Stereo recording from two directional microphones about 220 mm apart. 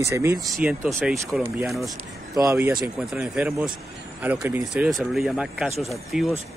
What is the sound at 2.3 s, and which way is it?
Speech, 15° right (ahead or behind).